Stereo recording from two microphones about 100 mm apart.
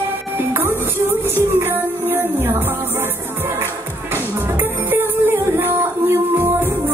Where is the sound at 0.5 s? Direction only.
25° right (ahead or behind).